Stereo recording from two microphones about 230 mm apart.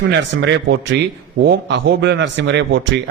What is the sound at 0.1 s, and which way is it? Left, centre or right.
A man's voice, right.